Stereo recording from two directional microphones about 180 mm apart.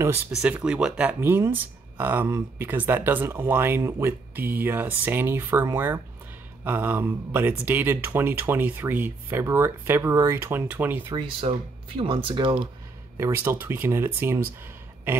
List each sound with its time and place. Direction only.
0.3 s speech: 5° right (ahead or behind)
11.5 s speech: 30° right (ahead or behind)
13.2 s speech: 15° right (ahead or behind)